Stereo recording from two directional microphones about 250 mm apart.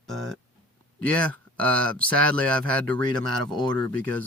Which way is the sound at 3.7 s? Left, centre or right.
Centre.